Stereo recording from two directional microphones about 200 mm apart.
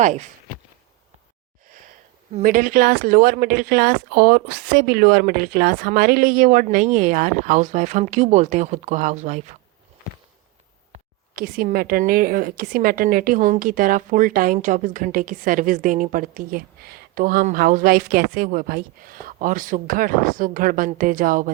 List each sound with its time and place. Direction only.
0.0 s speech: 35° right (ahead or behind)
2.3 s speech: 40° right (ahead or behind)
11.3 s a woman's voice: 45° right (ahead or behind)